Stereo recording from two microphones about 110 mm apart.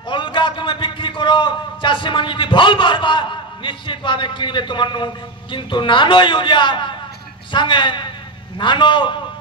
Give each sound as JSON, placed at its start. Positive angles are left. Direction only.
{"t": 0.1, "sound": "a man's voice", "side_deg": 50}